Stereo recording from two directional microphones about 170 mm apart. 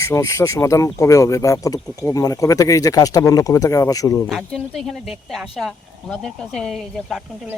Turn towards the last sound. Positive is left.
turn(degrees=0)  # may be behind; listen again after turning